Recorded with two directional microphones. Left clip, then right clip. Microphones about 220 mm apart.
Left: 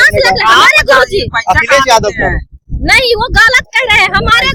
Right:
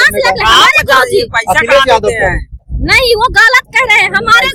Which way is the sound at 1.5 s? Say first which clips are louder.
Right 1 dB; 40° right (ahead or behind).